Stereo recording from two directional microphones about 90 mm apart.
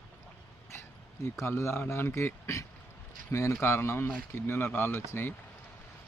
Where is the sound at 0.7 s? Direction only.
30° left (ahead or behind).